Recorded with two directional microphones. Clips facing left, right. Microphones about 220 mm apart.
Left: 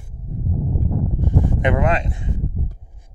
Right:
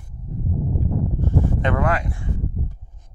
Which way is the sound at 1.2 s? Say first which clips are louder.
Left 3 dB; 20° left (ahead or behind).